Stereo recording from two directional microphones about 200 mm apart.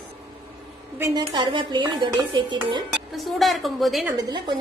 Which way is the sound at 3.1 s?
Centre (ahead or behind).